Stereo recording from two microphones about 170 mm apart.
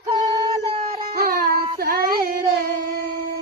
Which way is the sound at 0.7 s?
35° right (ahead or behind).